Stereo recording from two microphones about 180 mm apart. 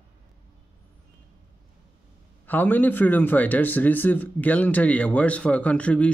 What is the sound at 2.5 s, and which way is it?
A man's voice, 10° left (ahead or behind).